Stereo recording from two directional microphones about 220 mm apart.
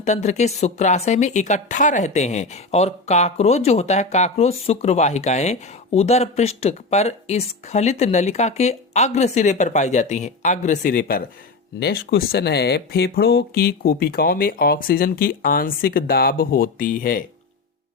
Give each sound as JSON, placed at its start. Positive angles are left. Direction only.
{"t": 0.0, "sound": "speech", "side_deg": 30}